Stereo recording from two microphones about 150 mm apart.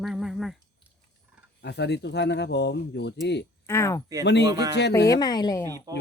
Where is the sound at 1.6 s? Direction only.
90° left.